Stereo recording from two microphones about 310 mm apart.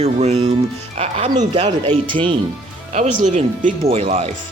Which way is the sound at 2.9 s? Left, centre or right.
Right.